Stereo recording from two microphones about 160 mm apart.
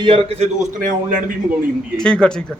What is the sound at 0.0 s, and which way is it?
Speech, 35° right (ahead or behind).